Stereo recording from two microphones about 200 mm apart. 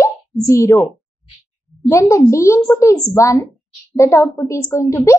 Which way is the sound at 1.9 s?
15° left (ahead or behind).